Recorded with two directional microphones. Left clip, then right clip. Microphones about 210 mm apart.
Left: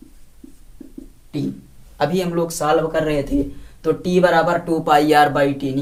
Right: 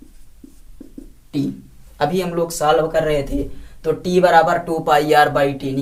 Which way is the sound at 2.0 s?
10° left (ahead or behind).